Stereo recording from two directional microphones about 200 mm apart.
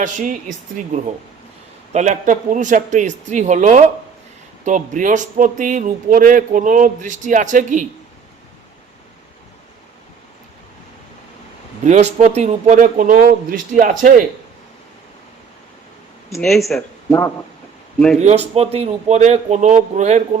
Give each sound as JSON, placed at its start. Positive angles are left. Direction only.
{"t": 0.0, "sound": "a man's voice", "side_deg": -40}
{"t": 1.9, "sound": "a man's voice", "side_deg": -35}
{"t": 11.9, "sound": "a man's voice", "side_deg": -35}
{"t": 16.4, "sound": "speech", "side_deg": 0}
{"t": 17.1, "sound": "speech", "side_deg": 15}
{"t": 18.2, "sound": "a man's voice", "side_deg": -35}